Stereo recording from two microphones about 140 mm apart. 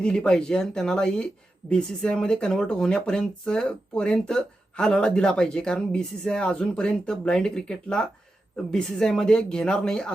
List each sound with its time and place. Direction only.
0.0 s speech: 5° left (ahead or behind)